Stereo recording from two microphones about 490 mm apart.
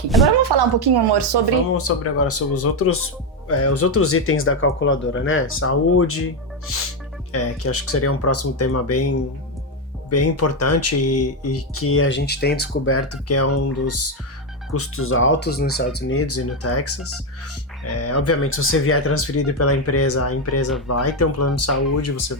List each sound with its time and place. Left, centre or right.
0.4 s speech: right
1.7 s speech: left
7.3 s speech: left